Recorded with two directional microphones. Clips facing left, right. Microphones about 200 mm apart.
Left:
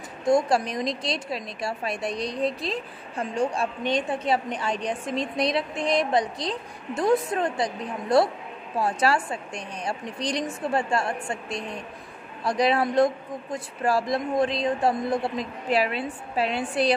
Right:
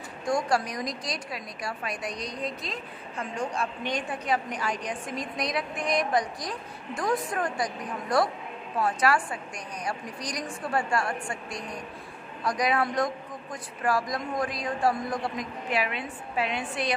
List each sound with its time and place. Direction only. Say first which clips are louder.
0.2 s speech: left 5 dB; 25° left (ahead or behind)